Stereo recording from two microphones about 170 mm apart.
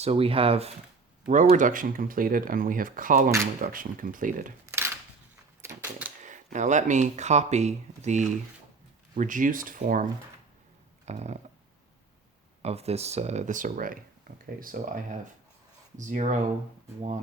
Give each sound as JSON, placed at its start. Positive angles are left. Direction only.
{"t": 0.0, "sound": "speech", "side_deg": -35}
{"t": 1.3, "sound": "speech", "side_deg": -45}
{"t": 4.6, "sound": "a sound", "side_deg": -15}
{"t": 6.2, "sound": "speech", "side_deg": -45}
{"t": 11.0, "sound": "a sound", "side_deg": -40}
{"t": 12.6, "sound": "speech", "side_deg": -40}